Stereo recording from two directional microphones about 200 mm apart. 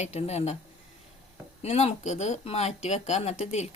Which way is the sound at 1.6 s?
30° left (ahead or behind).